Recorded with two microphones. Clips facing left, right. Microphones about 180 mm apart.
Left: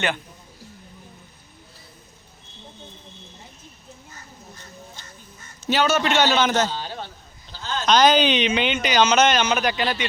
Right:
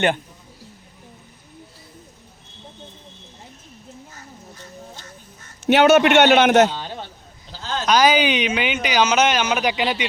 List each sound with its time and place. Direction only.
5.6 s a man's voice: 65° right (ahead or behind)
7.9 s speech: 10° right (ahead or behind)